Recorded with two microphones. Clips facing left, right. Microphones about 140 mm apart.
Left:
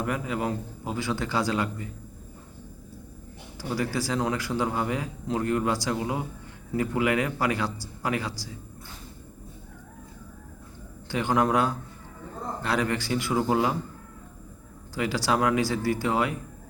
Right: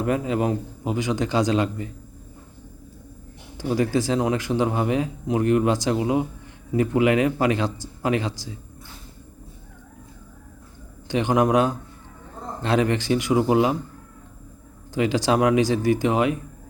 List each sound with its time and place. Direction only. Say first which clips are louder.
0.0 s speech: right 6 dB; 25° right (ahead or behind)
3.6 s speech: right 7 dB; 20° right (ahead or behind)
11.1 s speech: right 4 dB; 20° right (ahead or behind)
14.9 s speech: right 5 dB; 20° right (ahead or behind)